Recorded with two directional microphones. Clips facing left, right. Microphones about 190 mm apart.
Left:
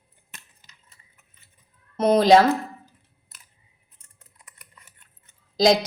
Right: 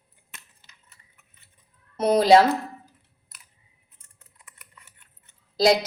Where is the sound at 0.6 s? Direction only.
15° left (ahead or behind).